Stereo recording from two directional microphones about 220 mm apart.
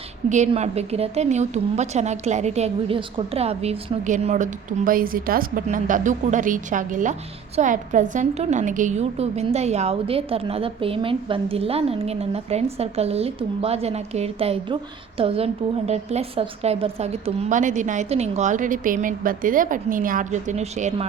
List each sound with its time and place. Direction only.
0.3 s a woman's voice: 30° right (ahead or behind)